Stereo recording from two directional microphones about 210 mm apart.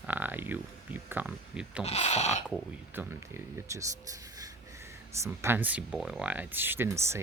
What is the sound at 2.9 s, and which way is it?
Speech, 10° right (ahead or behind).